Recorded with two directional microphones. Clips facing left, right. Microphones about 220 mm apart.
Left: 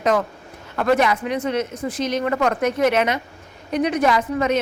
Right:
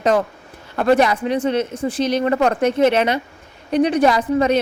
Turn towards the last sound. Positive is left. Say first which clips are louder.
# right 3 dB
turn(degrees=-35)  # may be behind; listen again after turning